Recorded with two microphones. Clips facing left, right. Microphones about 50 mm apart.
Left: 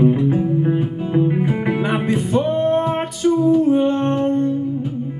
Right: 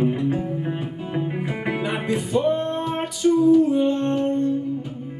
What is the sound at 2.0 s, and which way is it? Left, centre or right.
Music, left.